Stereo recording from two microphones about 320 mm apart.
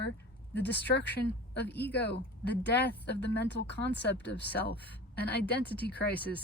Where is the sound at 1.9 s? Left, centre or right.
Left.